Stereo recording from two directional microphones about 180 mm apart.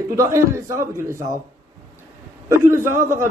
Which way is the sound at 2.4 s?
15° right (ahead or behind).